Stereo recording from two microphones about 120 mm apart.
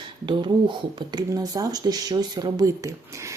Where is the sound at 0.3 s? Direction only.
40° right (ahead or behind).